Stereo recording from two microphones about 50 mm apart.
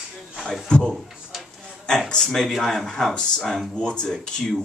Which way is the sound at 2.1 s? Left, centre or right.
Centre.